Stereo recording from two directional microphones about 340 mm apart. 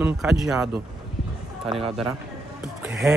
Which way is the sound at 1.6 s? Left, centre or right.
Centre.